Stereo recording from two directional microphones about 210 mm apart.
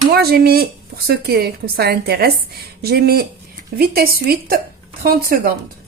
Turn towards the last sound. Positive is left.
turn(degrees=-45)  # may be behind; listen again after turning